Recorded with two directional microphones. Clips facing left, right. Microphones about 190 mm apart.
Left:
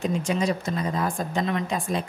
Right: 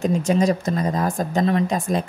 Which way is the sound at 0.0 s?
45° right (ahead or behind).